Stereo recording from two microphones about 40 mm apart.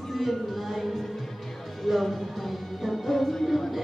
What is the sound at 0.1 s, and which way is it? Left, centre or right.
Music, centre.